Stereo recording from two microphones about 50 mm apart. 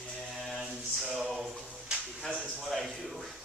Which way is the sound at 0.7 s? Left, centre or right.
Centre.